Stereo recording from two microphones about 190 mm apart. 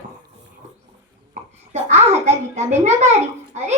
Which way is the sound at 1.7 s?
35° right (ahead or behind).